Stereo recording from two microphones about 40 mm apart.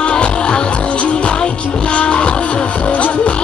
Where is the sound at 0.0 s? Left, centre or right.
Left.